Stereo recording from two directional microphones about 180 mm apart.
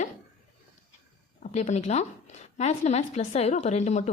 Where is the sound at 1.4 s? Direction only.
40° left (ahead or behind).